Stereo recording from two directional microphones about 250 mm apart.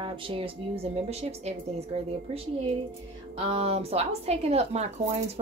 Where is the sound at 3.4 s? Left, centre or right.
Right.